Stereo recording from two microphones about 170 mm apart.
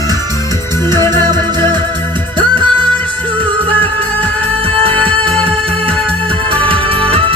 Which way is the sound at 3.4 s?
30° right (ahead or behind).